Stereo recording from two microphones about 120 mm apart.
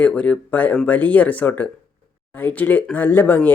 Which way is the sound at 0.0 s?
10° left (ahead or behind).